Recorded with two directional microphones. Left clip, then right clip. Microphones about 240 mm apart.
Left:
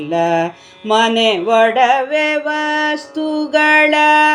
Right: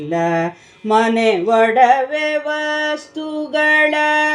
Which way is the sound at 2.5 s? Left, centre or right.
Left.